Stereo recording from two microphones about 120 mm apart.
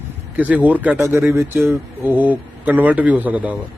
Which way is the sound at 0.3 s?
10° right (ahead or behind).